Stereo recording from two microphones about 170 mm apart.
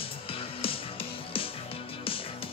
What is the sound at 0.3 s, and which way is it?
Music, 35° left (ahead or behind).